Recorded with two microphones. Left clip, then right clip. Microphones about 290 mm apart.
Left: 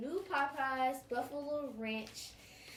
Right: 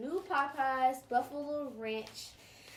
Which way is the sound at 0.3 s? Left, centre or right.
Centre.